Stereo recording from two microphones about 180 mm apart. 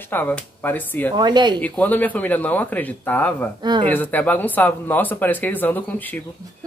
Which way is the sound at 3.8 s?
10° left (ahead or behind).